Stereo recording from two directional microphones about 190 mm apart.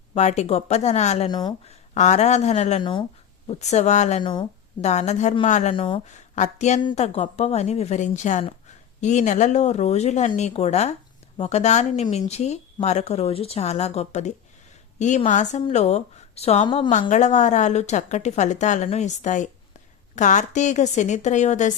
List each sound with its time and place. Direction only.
0.1 s speech: 35° left (ahead or behind)
1.3 s speech: 20° left (ahead or behind)
1.6 s speech: 35° left (ahead or behind)
4.2 s speech: 25° left (ahead or behind)
4.8 s speech: 35° left (ahead or behind)
5.7 s speech: 25° left (ahead or behind)